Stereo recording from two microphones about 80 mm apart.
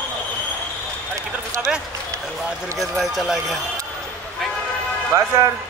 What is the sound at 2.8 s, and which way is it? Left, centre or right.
Speech, centre.